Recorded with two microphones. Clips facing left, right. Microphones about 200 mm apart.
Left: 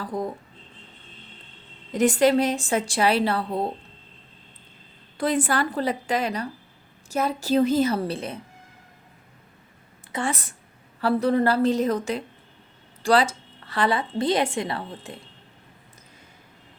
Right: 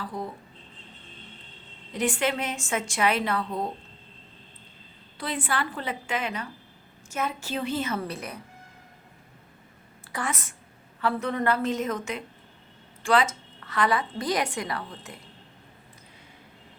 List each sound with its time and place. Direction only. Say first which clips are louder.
0.0 s a sound: left 5 dB; 45° left (ahead or behind)
1.9 s a woman's voice: left 8 dB; 40° left (ahead or behind)
5.1 s a woman's voice: left 7 dB; 45° left (ahead or behind); by 8.4 s 30° left (ahead or behind)
10.1 s a woman's voice: left 4 dB; 30° left (ahead or behind)